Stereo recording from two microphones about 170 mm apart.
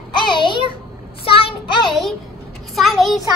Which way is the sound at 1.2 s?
35° left (ahead or behind).